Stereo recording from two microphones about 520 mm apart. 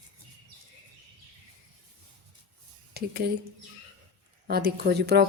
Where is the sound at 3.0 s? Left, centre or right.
Centre.